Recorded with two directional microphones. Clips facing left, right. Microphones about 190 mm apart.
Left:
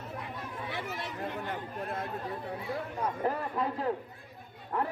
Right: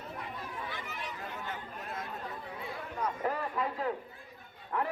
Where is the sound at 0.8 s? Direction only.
65° left (ahead or behind).